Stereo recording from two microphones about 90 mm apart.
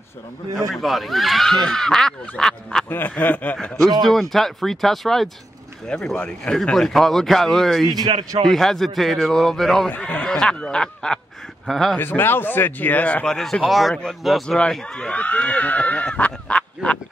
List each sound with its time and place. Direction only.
0.6 s speech: centre (ahead or behind)
2.9 s speech: 20° left (ahead or behind)
4.1 s speech: centre (ahead or behind)
9.8 s speech: 20° left (ahead or behind); by 12.0 s centre (ahead or behind)
12.0 s speech: 25° left (ahead or behind); by 14.6 s centre (ahead or behind)
14.6 s speech: 10° left (ahead or behind)